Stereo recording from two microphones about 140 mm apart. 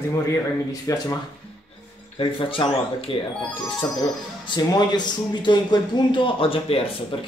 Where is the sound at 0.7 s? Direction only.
25° left (ahead or behind).